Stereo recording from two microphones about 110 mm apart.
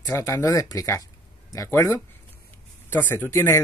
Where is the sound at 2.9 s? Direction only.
20° left (ahead or behind).